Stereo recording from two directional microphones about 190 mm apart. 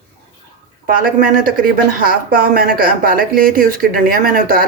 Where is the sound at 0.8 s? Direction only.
50° right (ahead or behind).